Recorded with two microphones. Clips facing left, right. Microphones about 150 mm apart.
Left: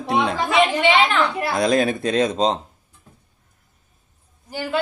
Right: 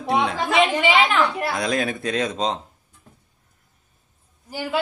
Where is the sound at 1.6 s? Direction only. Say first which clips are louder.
Left 9 dB; 30° left (ahead or behind).